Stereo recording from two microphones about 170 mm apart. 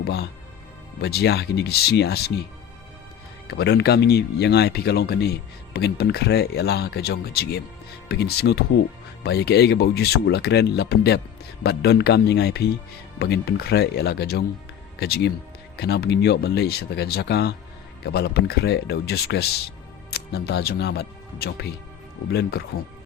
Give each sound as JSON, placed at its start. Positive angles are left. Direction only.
{"t": 0.0, "sound": "speech", "side_deg": 75}
{"t": 3.4, "sound": "speech", "side_deg": 75}